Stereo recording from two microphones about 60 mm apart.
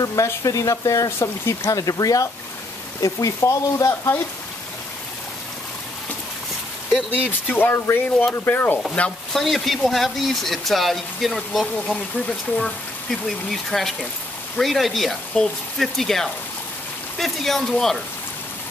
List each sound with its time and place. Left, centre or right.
0.0 s speech: left
1.7 s speech: left
3.0 s speech: left
7.1 s speech: left
9.0 s speech: left
9.3 s speech: centre
11.6 s speech: centre
12.6 s speech: centre